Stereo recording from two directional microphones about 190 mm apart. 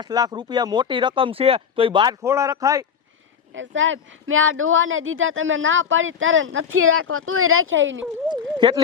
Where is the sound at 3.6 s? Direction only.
85° right.